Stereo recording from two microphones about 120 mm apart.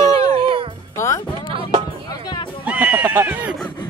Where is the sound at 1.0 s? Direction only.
25° left (ahead or behind).